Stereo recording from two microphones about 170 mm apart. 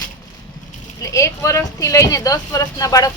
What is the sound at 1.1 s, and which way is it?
Speech, 15° left (ahead or behind).